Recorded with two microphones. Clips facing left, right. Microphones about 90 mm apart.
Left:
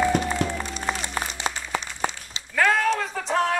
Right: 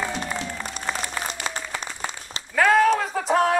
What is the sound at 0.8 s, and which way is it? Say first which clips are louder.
Applause: right 1 dB; 25° left (ahead or behind).